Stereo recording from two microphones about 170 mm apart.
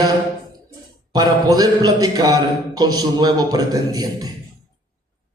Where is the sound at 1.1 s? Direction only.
20° right (ahead or behind).